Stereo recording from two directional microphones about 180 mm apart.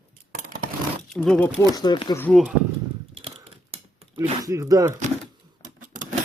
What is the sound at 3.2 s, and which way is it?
Typewriter, 30° right (ahead or behind).